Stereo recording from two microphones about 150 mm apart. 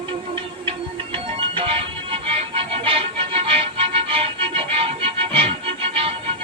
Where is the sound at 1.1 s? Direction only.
35° right (ahead or behind).